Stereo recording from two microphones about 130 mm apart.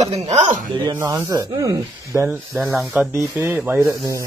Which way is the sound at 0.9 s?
25° right (ahead or behind).